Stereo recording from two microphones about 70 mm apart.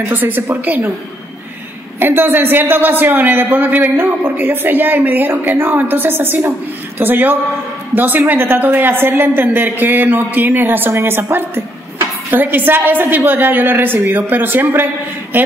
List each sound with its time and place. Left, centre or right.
0.1 s a man's voice: right
2.0 s a man's voice: right